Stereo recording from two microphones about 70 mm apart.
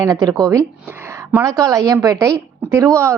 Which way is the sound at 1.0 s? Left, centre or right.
Right.